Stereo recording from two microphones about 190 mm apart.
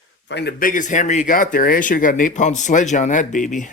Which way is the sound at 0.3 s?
60° left (ahead or behind).